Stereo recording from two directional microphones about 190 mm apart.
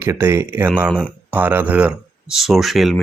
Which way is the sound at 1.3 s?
10° right (ahead or behind).